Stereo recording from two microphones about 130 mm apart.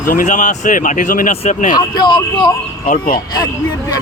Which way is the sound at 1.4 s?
70° left (ahead or behind).